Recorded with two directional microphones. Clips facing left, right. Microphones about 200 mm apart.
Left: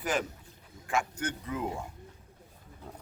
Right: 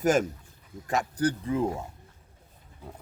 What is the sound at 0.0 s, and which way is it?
A man's voice, 45° right (ahead or behind).